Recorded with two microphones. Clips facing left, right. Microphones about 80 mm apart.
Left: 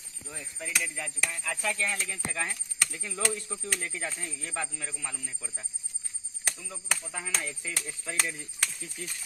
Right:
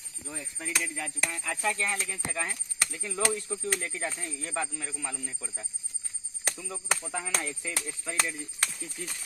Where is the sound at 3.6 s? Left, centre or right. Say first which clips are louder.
Right 2 dB; right.